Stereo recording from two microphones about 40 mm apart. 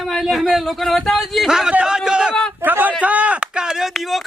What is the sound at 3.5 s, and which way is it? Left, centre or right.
Speech, centre.